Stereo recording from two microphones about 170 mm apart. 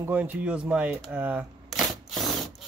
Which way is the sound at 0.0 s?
10° right (ahead or behind).